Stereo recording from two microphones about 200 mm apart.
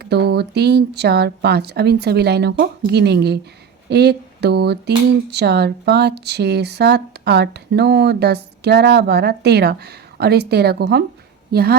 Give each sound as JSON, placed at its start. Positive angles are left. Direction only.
{"t": 0.0, "sound": "a woman's voice", "side_deg": -55}